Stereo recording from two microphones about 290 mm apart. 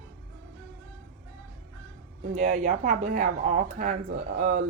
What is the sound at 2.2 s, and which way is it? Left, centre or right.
Speech, right.